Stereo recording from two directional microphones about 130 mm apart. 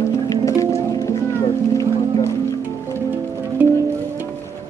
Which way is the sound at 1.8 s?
25° left (ahead or behind).